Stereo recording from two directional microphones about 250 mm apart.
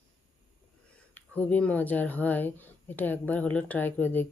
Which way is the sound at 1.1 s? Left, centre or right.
Centre.